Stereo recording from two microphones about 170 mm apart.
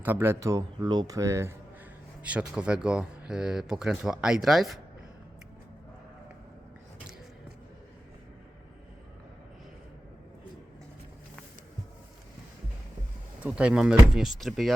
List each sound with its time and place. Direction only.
0.0 s speech: 15° right (ahead or behind)
13.4 s speech: 5° right (ahead or behind)